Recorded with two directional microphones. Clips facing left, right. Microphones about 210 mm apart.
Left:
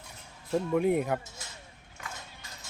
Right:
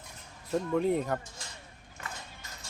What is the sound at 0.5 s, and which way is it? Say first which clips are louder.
Speech: left 2 dB; 10° left (ahead or behind).